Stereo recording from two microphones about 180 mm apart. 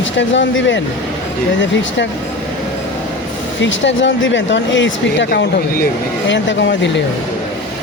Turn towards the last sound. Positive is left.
turn(degrees=85)